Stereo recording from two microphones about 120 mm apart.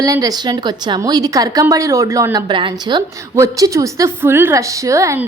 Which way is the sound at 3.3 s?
30° right (ahead or behind).